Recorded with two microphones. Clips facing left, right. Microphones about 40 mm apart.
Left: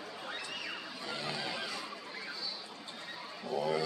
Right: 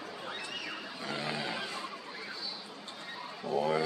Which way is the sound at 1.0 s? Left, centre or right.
Right.